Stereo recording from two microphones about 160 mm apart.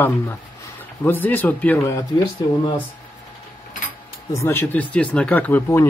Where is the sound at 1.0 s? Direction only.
10° left (ahead or behind).